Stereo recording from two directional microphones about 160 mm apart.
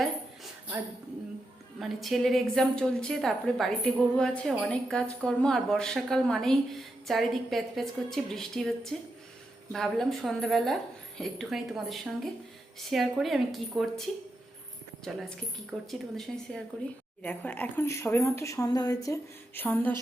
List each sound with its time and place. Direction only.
1.8 s a woman's voice: centre (ahead or behind)
15.1 s a woman's voice: centre (ahead or behind)